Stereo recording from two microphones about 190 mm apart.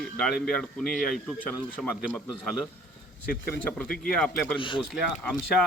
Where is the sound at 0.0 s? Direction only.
Centre (ahead or behind).